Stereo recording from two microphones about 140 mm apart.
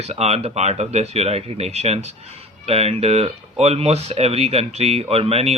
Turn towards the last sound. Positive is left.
turn(degrees=-50)  # may be behind; listen again after turning